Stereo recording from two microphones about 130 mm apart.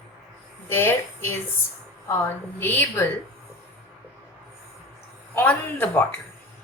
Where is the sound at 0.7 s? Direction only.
15° left (ahead or behind).